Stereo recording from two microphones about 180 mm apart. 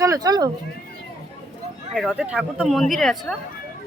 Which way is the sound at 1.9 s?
5° right (ahead or behind).